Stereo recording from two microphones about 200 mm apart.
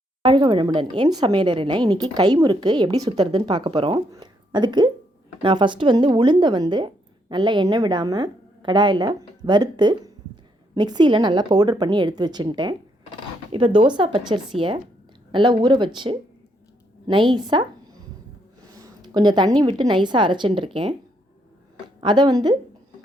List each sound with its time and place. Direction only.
0.2 s speech: 25° right (ahead or behind)
18.6 s a sound: 15° right (ahead or behind)
19.9 s speech: 25° right (ahead or behind)
22.0 s speech: 20° right (ahead or behind)